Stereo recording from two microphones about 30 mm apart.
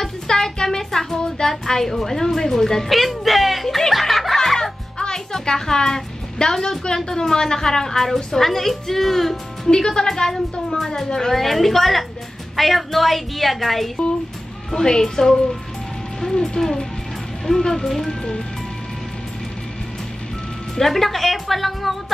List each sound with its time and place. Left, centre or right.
0.0 s music: centre
2.9 s speech: centre
3.6 s music: centre
4.9 s music: left; by 9.4 s centre
9.7 s a woman's voice: left; by 13.8 s centre
14.7 s music: centre
20.7 s a woman's voice: centre